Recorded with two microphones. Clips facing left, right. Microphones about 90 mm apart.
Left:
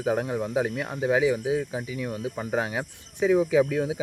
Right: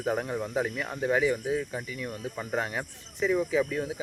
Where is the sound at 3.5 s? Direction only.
80° left.